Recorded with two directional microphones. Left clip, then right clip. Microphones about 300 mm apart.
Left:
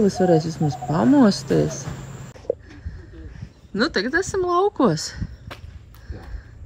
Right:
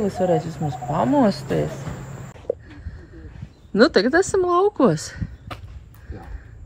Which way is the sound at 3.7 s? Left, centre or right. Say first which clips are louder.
Right 5 dB; centre.